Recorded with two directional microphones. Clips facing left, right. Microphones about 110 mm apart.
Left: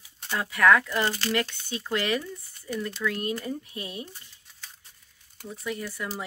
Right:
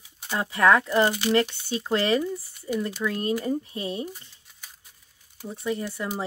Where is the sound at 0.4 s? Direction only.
30° right (ahead or behind).